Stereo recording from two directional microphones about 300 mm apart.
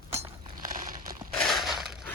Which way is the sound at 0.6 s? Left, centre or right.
Right.